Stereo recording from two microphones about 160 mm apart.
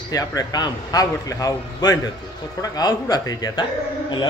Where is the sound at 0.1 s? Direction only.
25° left (ahead or behind).